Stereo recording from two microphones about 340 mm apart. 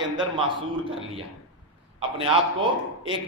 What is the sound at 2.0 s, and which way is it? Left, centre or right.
A man's voice, centre.